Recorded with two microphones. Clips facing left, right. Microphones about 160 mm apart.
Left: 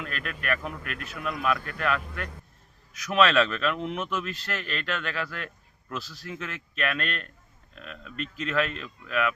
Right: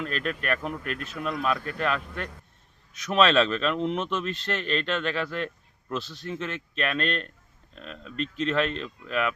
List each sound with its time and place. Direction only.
0.0 s speech: 30° right (ahead or behind)